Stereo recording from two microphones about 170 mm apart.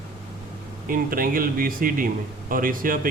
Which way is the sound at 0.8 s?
55° right (ahead or behind).